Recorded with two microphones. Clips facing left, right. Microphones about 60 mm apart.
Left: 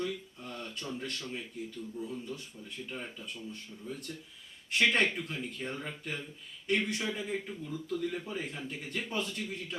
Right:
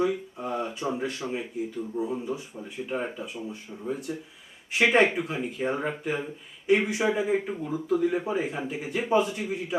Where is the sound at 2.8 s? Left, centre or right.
Right.